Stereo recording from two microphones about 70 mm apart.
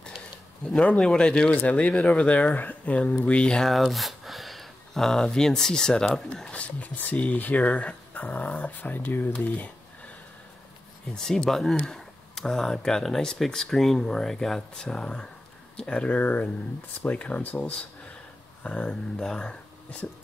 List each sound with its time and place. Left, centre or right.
0.7 s speech: centre
6.5 s speech: centre
11.1 s speech: centre
16.2 s speech: left; by 19.5 s centre